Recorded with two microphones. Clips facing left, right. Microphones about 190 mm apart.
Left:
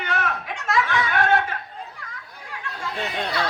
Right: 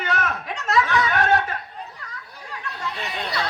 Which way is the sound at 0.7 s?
40° right (ahead or behind).